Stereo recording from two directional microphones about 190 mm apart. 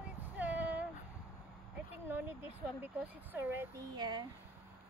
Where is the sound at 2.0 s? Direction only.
10° right (ahead or behind).